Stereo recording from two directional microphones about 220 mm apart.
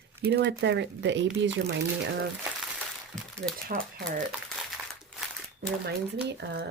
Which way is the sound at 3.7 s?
40° right (ahead or behind).